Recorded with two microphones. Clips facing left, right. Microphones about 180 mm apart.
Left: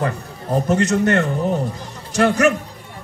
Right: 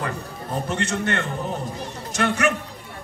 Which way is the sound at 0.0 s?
35° left (ahead or behind).